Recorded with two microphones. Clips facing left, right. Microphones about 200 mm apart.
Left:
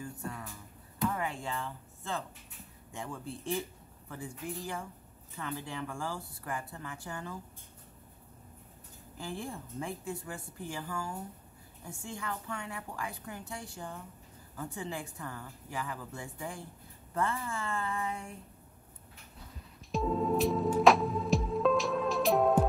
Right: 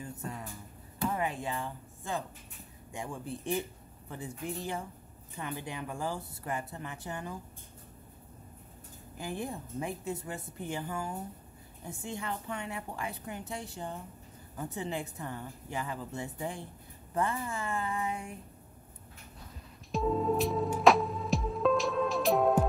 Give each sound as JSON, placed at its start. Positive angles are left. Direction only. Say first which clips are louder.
{"t": 0.0, "sound": "a woman's voice", "louder": "even", "side_deg": -20}
{"t": 9.2, "sound": "a woman's voice", "louder": "right 3 dB", "side_deg": -20}
{"t": 19.9, "sound": "music", "louder": "right 1 dB", "side_deg": 0}